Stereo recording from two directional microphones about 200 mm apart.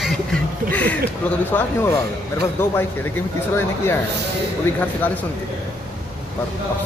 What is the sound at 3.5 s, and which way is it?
Speech, 10° left (ahead or behind).